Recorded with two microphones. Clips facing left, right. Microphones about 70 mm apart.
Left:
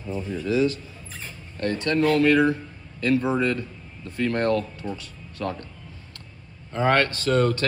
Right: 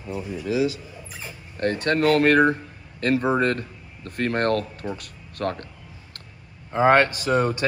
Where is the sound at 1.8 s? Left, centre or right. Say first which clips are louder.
Right 1 dB; right.